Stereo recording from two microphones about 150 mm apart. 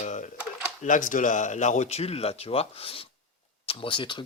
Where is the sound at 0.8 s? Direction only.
60° left (ahead or behind).